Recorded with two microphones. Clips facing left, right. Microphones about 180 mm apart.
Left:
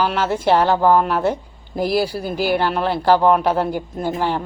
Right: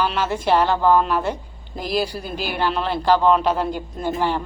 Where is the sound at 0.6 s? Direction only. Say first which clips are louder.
Left 2 dB; 15° left (ahead or behind).